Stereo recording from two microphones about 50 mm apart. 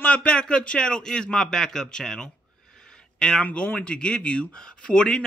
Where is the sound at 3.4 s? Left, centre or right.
Left.